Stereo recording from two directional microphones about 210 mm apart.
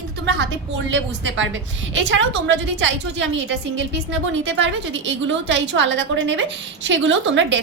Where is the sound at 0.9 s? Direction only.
65° right (ahead or behind).